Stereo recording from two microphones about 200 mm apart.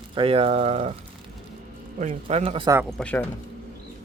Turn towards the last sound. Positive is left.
turn(degrees=5)  # may be behind; listen again after turning